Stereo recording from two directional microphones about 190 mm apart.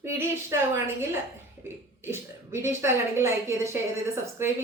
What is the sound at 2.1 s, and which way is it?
Speech, 15° right (ahead or behind).